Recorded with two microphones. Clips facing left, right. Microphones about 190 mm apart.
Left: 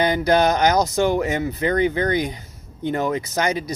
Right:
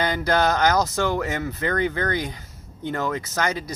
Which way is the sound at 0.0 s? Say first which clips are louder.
Left 4 dB; 15° left (ahead or behind).